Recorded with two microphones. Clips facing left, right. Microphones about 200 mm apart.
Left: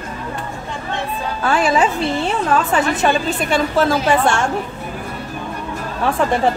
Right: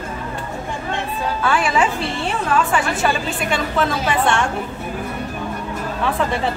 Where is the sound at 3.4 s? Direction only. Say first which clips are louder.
Left 3 dB; 45° left (ahead or behind).